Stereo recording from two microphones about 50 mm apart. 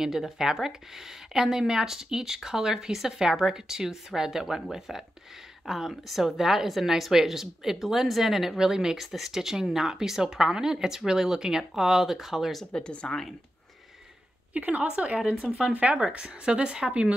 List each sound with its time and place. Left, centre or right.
0.0 s a woman's voice: centre
12.7 s speech: left
14.5 s a woman's voice: right